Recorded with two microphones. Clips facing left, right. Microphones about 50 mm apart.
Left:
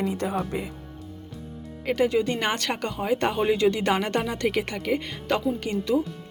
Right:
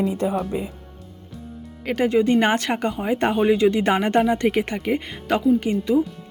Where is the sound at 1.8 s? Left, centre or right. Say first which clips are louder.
Right 1 dB; right.